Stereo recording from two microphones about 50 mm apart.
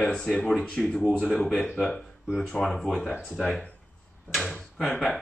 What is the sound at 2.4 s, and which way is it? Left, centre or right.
Speech, centre.